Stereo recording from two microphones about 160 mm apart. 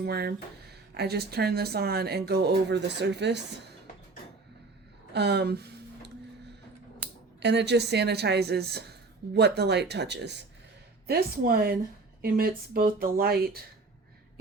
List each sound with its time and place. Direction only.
0.0 s speech: 90° right
5.1 s a sound: 90° right
7.3 s speech: 90° right
11.0 s speech: 70° right (ahead or behind)